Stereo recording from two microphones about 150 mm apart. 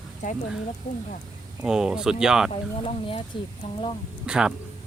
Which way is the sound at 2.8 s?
40° left (ahead or behind).